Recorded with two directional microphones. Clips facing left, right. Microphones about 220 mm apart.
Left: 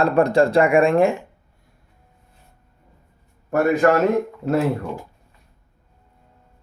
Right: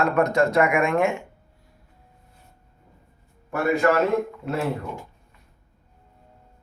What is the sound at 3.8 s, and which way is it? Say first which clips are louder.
Speech: left 3 dB; 50° left (ahead or behind).